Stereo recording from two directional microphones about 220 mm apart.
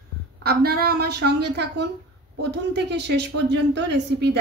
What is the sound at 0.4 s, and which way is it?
Speech, 45° right (ahead or behind).